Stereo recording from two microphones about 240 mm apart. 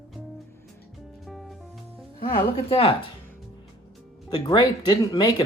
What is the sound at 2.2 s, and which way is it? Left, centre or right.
Speech, left.